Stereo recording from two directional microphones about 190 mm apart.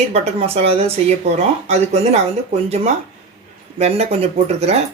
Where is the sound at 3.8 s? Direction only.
35° right (ahead or behind).